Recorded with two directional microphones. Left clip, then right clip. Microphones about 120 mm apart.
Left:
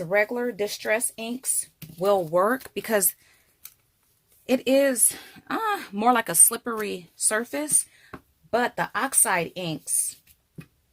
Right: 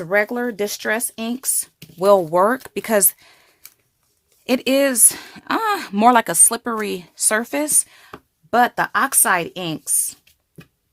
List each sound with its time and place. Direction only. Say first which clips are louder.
0.0 s speech: right 4 dB; 70° right (ahead or behind)
2.0 s speech: right 7 dB; 75° right (ahead or behind)
2.4 s speech: right 6 dB; 45° right (ahead or behind)
4.4 s speech: right 3 dB; 40° right (ahead or behind); by 6.2 s 60° right (ahead or behind)
6.2 s a woman's voice: right 5 dB; 40° right (ahead or behind); by 8.1 s 55° right (ahead or behind)
8.4 s speech: right 8 dB; 70° right (ahead or behind)